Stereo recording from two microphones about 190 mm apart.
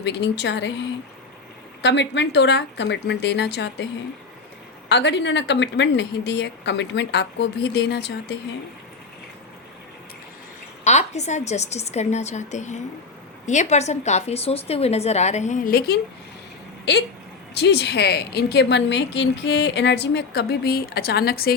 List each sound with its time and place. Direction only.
0.0 s a woman's voice: 65° left (ahead or behind)
4.9 s a woman's voice: 65° left (ahead or behind)
10.8 s a woman's voice: 35° left (ahead or behind)
17.6 s a woman's voice: 60° left (ahead or behind)